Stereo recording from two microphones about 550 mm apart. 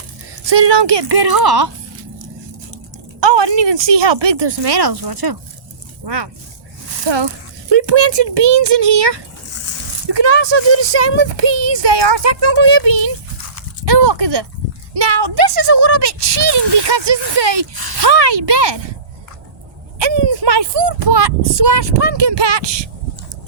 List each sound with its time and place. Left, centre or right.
0.4 s speech: right
3.2 s speech: right
20.0 s speech: right